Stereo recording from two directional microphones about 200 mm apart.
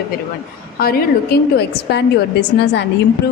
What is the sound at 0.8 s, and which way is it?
A woman's voice, 50° left (ahead or behind).